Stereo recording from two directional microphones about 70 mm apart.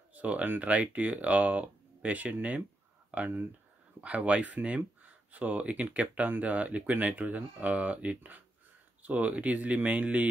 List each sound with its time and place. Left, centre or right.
0.1 s speech: right